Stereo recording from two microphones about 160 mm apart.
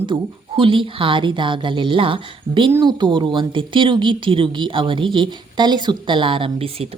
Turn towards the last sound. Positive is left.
turn(degrees=-35)  # may be behind; listen again after turning